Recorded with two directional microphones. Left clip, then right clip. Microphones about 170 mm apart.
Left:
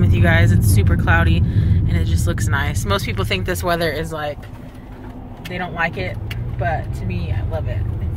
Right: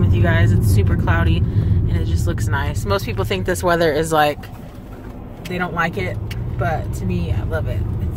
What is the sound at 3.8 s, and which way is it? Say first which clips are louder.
Speech: right 5 dB; 45° right (ahead or behind).